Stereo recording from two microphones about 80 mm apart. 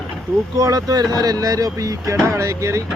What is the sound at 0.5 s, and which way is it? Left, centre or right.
Speech, right.